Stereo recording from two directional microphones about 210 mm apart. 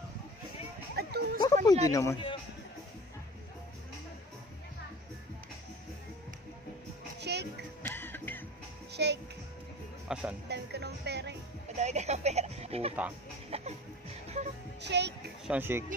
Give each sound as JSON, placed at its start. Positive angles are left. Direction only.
{"t": 0.9, "sound": "music", "side_deg": -50}
{"t": 1.4, "sound": "a man's voice", "side_deg": 20}
{"t": 7.2, "sound": "music", "side_deg": -50}
{"t": 7.8, "sound": "music", "side_deg": 10}
{"t": 8.9, "sound": "music", "side_deg": -55}
{"t": 10.1, "sound": "music", "side_deg": -5}
{"t": 10.5, "sound": "music", "side_deg": -50}
{"t": 11.7, "sound": "speech", "side_deg": -35}
{"t": 13.5, "sound": "music", "side_deg": -30}
{"t": 14.8, "sound": "speech", "side_deg": -55}
{"t": 15.4, "sound": "speech", "side_deg": -10}